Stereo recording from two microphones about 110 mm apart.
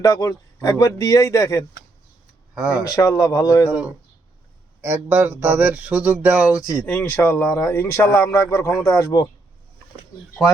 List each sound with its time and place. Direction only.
0.0 s speech: 35° left (ahead or behind)
2.6 s speech: 10° right (ahead or behind)
2.8 s speech: 30° left (ahead or behind)
4.8 s speech: 20° right (ahead or behind)
6.8 s speech: 15° left (ahead or behind)